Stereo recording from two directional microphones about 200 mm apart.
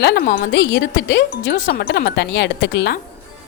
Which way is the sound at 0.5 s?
60° left (ahead or behind).